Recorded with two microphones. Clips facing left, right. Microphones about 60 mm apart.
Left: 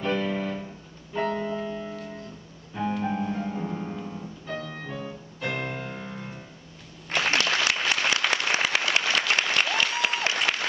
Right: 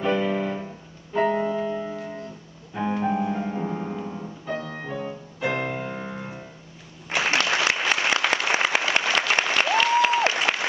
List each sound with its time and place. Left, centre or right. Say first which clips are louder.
0.0 s music: right 4 dB; centre
7.1 s applause: right 2 dB; centre